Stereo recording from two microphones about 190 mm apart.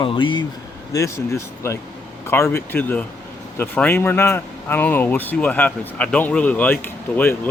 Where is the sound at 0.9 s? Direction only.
15° left (ahead or behind).